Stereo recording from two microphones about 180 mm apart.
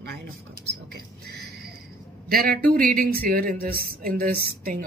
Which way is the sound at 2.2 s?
55° right (ahead or behind).